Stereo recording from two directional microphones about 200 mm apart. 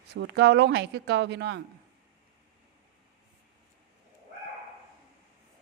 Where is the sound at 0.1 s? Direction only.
55° right (ahead or behind).